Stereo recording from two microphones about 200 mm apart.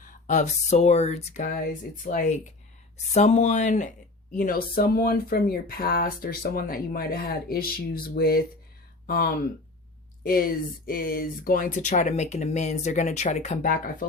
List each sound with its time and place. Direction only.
0.0 s speech: 40° left (ahead or behind)
3.2 s speech: 35° left (ahead or behind)